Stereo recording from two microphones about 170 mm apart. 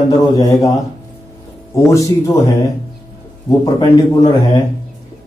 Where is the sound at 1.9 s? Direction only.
20° left (ahead or behind).